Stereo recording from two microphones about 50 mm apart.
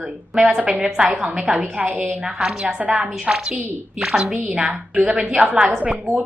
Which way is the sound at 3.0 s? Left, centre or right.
Centre.